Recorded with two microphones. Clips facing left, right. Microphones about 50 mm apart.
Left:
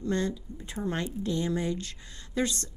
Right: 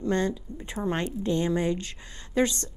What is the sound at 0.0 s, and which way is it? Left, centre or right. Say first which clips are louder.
A woman's voice: right 3 dB; right.